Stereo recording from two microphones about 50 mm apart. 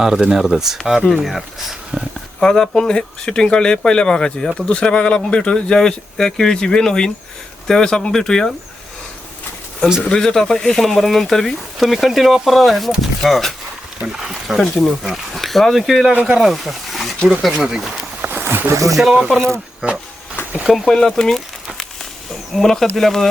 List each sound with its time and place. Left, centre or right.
0.0 s speech: centre
2.4 s speech: centre
10.0 s speech: centre
18.2 s a sound: right
18.4 s speech: right
19.1 s speech: centre
20.7 s speech: centre
20.9 s speech: centre
22.5 s speech: centre